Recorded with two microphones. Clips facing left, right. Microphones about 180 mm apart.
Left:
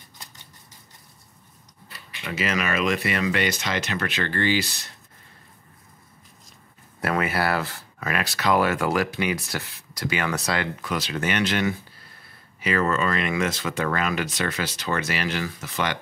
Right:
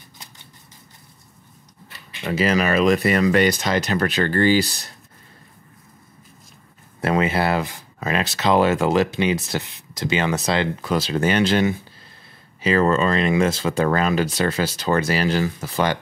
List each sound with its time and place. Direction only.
2.2 s speech: 35° right (ahead or behind)
7.1 s speech: 20° right (ahead or behind)